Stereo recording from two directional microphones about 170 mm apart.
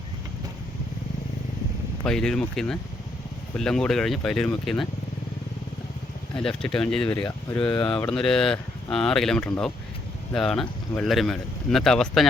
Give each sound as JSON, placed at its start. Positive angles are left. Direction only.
{"t": 2.0, "sound": "speech", "side_deg": 5}
{"t": 6.3, "sound": "speech", "side_deg": 5}
{"t": 7.6, "sound": "speech", "side_deg": 30}
{"t": 8.1, "sound": "speech", "side_deg": 5}